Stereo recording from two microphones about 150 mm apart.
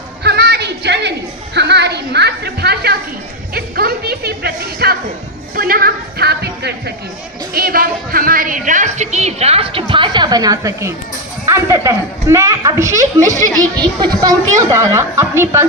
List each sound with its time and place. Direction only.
0.2 s music: 90° right
5.5 s music: 80° right
7.5 s a woman's voice: 80° right; by 15.6 s 20° right (ahead or behind)